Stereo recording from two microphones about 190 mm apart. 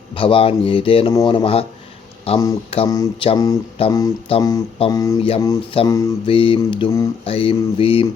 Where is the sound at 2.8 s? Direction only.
20° left (ahead or behind).